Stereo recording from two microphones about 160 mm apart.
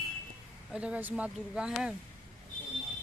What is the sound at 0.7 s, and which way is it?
Speech, 5° right (ahead or behind).